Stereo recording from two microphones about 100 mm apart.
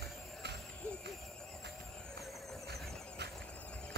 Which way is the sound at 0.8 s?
10° left (ahead or behind).